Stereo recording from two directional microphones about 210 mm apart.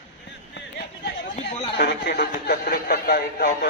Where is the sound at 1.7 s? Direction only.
50° left (ahead or behind).